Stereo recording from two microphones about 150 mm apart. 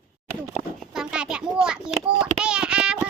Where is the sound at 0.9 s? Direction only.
5° right (ahead or behind).